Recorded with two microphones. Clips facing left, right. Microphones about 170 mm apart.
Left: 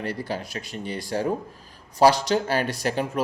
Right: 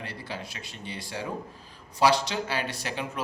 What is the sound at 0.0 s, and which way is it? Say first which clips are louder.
Speech: left 8 dB; 40° left (ahead or behind).